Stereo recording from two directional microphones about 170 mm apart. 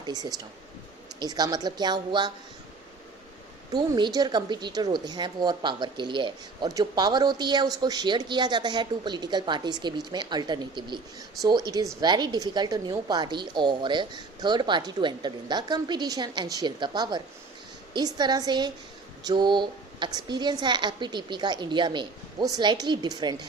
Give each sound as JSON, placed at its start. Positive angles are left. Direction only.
{"t": 0.0, "sound": "a woman's voice", "side_deg": -25}
{"t": 3.7, "sound": "a woman's voice", "side_deg": -25}